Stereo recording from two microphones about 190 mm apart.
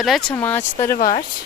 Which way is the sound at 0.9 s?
40° left (ahead or behind).